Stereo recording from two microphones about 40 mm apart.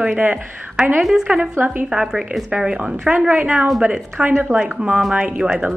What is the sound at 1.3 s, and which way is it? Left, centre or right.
Speech, right.